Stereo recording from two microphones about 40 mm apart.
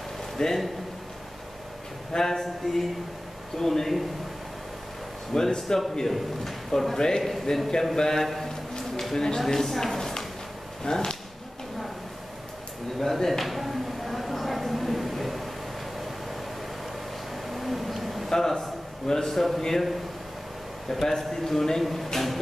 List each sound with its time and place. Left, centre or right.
0.4 s a man's voice: centre
2.1 s a man's voice: centre
5.3 s a man's voice: centre
13.0 s a sound: centre
17.5 s a sound: centre
18.3 s a man's voice: centre
20.9 s a man's voice: centre